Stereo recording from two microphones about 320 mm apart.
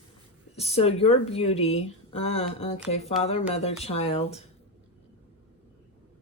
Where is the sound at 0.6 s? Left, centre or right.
Centre.